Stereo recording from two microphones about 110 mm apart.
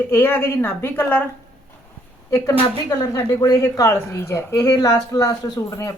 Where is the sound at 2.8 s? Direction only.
35° left (ahead or behind).